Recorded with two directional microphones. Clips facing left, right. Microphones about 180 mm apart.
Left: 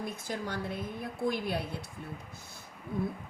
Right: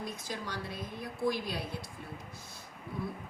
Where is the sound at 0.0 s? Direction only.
55° left (ahead or behind).